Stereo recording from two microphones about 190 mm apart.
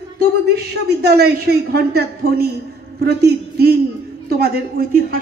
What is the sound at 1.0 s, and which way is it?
Speech, 55° right (ahead or behind).